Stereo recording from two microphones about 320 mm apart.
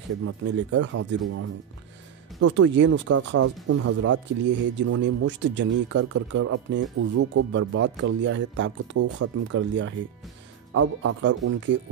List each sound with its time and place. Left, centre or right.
0.2 s speech: right